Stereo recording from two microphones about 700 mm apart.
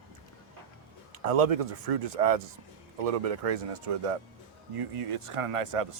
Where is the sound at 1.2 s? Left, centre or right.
Right.